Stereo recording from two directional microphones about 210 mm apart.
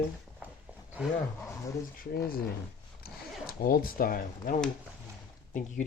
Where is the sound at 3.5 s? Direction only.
45° left (ahead or behind).